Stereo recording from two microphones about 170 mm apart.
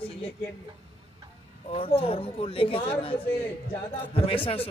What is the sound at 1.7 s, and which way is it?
A man's voice, 35° left (ahead or behind).